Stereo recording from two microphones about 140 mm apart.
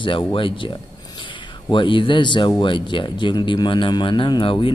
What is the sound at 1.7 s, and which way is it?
Speech, 35° left (ahead or behind).